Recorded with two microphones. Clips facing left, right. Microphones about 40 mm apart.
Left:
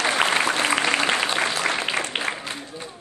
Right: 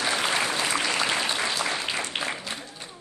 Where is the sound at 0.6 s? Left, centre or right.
Left.